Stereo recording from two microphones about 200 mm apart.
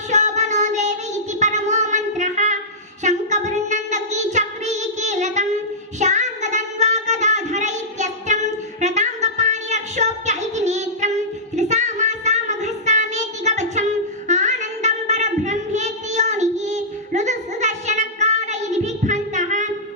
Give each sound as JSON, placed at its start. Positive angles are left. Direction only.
{"t": 0.1, "sound": "child singing", "side_deg": -35}